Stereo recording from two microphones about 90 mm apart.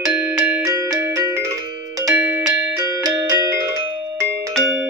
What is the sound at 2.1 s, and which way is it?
Music, 10° right (ahead or behind).